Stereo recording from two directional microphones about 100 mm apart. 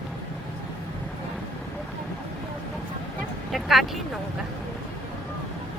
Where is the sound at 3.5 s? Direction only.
Centre (ahead or behind).